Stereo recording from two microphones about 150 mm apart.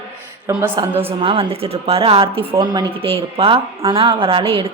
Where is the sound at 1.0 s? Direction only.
40° right (ahead or behind).